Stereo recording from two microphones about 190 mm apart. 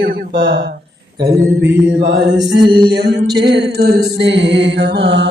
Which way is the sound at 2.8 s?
60° right (ahead or behind).